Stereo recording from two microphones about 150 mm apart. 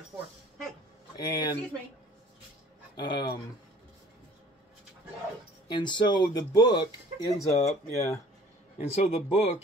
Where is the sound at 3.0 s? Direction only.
30° left (ahead or behind).